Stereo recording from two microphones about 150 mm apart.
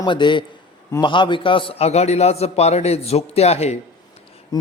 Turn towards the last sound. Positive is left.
turn(degrees=25)  # may be behind; listen again after turning